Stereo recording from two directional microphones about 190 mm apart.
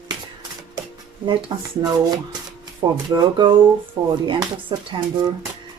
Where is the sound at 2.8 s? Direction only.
20° right (ahead or behind).